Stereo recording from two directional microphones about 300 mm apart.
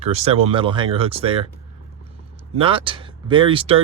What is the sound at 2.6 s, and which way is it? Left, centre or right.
Speech, centre.